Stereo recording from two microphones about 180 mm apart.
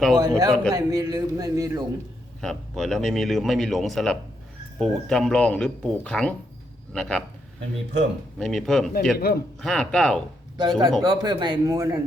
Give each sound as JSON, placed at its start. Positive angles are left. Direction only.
{"t": 0.2, "sound": "speech", "side_deg": -20}
{"t": 2.4, "sound": "speech", "side_deg": 0}
{"t": 8.4, "sound": "speech", "side_deg": 0}
{"t": 9.1, "sound": "speech", "side_deg": 60}
{"t": 9.6, "sound": "speech", "side_deg": 5}
{"t": 10.6, "sound": "speech", "side_deg": -25}